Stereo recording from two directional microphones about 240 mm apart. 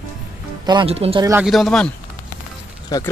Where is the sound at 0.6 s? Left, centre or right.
Centre.